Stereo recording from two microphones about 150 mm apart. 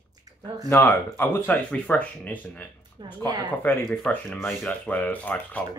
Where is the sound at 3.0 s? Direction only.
30° right (ahead or behind).